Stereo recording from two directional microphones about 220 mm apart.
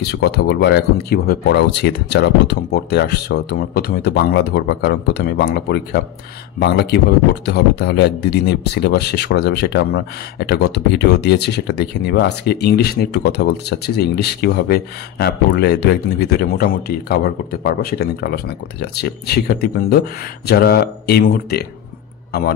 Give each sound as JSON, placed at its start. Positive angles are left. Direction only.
{"t": 0.0, "sound": "speech", "side_deg": 50}